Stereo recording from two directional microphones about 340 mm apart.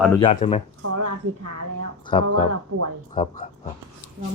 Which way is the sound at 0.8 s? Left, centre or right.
Right.